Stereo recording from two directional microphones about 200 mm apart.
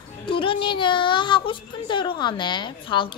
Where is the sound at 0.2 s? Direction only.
25° left (ahead or behind).